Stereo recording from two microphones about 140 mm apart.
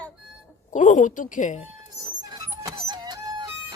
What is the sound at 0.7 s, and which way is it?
Speech, 65° left (ahead or behind).